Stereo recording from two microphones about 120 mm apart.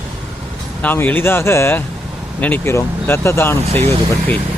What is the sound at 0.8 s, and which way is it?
Speech, 15° left (ahead or behind).